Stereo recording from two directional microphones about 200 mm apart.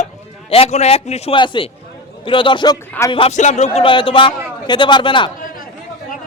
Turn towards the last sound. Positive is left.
turn(degrees=25)  # may be behind; listen again after turning